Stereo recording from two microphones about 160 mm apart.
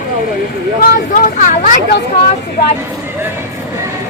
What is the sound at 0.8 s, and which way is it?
Speech, 60° left (ahead or behind).